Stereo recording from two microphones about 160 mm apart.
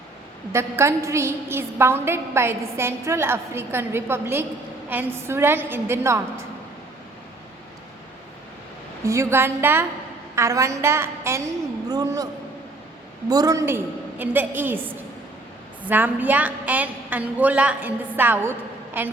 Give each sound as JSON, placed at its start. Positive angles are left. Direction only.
{"t": 0.5, "sound": "a woman's voice", "side_deg": -15}
{"t": 9.0, "sound": "a woman's voice", "side_deg": -15}